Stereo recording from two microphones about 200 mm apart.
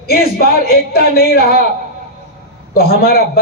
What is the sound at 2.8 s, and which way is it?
Speech, 50° left (ahead or behind).